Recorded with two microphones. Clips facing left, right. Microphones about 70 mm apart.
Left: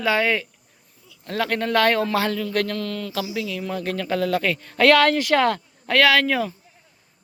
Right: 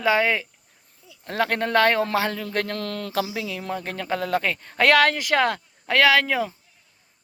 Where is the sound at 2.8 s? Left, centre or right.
Right.